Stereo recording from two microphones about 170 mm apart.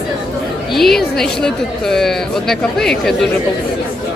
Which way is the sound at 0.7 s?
Centre (ahead or behind).